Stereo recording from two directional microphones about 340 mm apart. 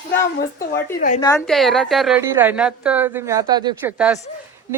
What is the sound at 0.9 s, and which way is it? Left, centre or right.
Speech, left.